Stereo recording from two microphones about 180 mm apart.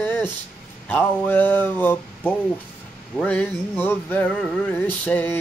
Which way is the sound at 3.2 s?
10° left (ahead or behind).